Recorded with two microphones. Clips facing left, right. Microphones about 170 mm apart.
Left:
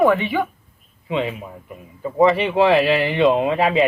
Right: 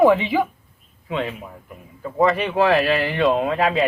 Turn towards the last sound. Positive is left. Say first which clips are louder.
# left 2 dB
turn(degrees=0)  # may be behind; listen again after turning